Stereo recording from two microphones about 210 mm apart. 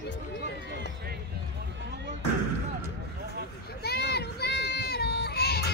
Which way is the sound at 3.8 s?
50° left (ahead or behind).